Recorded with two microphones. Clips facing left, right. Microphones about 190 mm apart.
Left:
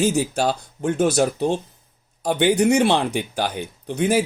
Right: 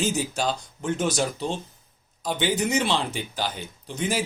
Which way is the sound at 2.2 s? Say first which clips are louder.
Left 8 dB; 65° left (ahead or behind).